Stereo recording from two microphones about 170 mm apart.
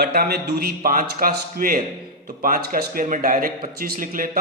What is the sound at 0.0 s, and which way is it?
A man's voice, 65° right (ahead or behind).